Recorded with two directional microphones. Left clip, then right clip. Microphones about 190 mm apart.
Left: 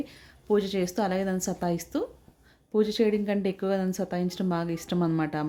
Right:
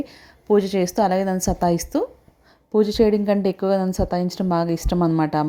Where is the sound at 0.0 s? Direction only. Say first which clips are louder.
Right 6 dB; 25° right (ahead or behind).